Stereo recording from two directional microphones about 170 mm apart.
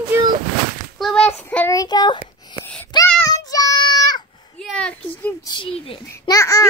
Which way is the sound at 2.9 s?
20° left (ahead or behind).